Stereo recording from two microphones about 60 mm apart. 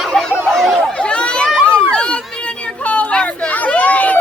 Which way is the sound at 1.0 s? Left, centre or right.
Centre.